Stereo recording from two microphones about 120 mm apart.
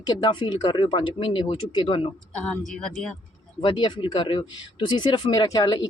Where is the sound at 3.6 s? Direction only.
40° left (ahead or behind).